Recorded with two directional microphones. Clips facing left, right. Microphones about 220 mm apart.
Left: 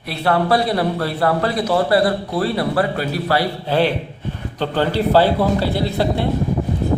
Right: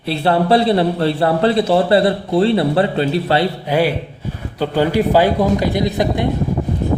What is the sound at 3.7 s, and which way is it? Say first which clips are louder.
A man's voice: left 1 dB; 10° right (ahead or behind).